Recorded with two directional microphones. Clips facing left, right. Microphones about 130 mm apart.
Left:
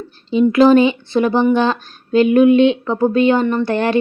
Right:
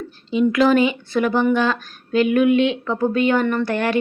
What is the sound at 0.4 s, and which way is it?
Speech, 30° left (ahead or behind).